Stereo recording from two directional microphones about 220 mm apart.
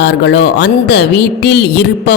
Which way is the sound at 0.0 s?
50° left (ahead or behind).